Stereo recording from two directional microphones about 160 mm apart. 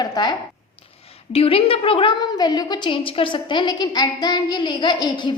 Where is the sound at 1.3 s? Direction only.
35° left (ahead or behind).